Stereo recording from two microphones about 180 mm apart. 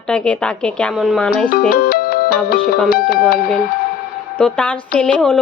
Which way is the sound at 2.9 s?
55° left (ahead or behind).